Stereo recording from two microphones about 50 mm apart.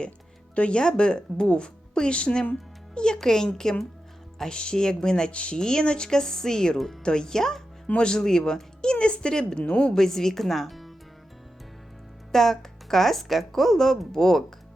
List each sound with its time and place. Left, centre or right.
0.5 s speech: left; by 10.9 s centre
12.3 s speech: centre